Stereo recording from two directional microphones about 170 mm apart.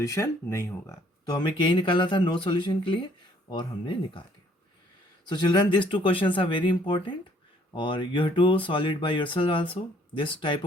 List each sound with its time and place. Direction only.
0.0 s speech: 20° left (ahead or behind)
5.3 s speech: 25° left (ahead or behind)